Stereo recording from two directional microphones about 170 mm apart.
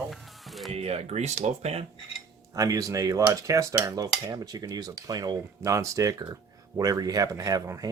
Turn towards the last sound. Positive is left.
turn(degrees=-20)  # may be behind; listen again after turning